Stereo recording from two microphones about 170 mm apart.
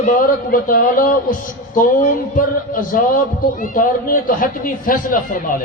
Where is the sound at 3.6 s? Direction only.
50° left (ahead or behind).